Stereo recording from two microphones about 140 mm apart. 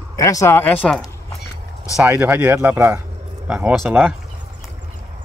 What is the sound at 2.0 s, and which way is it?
Speech, 15° right (ahead or behind).